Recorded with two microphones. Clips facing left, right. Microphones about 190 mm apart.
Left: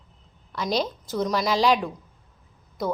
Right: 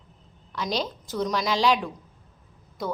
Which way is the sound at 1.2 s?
5° left (ahead or behind).